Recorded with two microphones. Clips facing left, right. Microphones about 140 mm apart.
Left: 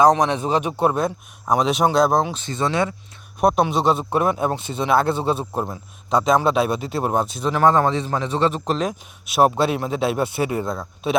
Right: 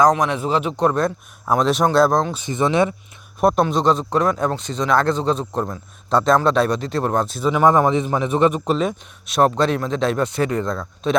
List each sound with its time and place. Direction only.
0.0 s speech: 30° left (ahead or behind); by 2.3 s 5° left (ahead or behind)
2.3 s speech: 15° right (ahead or behind)
3.4 s a man's voice: 5° left (ahead or behind)
6.1 s a man's voice: centre (ahead or behind)
7.3 s a man's voice: centre (ahead or behind)
7.6 s a man's voice: 15° right (ahead or behind); by 11.2 s 5° left (ahead or behind)